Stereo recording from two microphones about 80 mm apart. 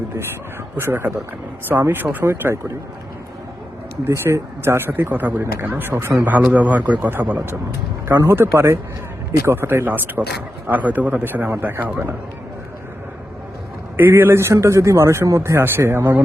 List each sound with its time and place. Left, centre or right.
0.8 s speech: right
4.1 s speech: right
13.9 s speech: right